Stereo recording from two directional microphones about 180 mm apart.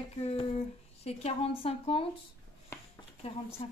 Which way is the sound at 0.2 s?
35° left (ahead or behind).